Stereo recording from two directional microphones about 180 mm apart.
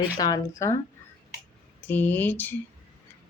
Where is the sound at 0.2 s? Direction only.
20° left (ahead or behind).